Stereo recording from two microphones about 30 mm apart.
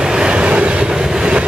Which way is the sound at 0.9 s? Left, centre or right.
Right.